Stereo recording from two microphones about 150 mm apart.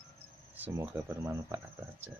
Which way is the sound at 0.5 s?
10° right (ahead or behind).